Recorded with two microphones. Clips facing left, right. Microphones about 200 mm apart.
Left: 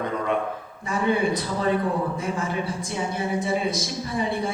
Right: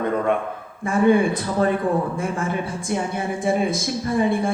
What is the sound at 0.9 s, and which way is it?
Speech, 50° right (ahead or behind).